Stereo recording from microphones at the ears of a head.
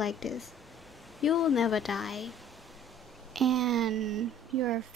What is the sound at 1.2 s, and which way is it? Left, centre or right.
Speech, left.